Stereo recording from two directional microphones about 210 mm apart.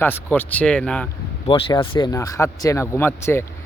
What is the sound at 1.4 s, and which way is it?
Speech, 25° left (ahead or behind).